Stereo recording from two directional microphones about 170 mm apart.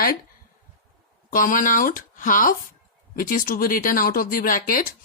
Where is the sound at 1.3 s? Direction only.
55° left (ahead or behind).